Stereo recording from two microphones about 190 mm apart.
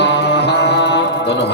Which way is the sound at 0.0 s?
65° left (ahead or behind).